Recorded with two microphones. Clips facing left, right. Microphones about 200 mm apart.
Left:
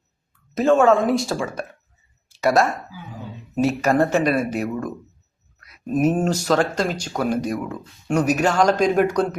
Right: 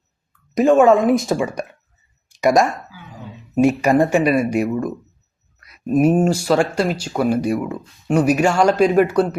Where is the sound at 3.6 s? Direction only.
15° right (ahead or behind).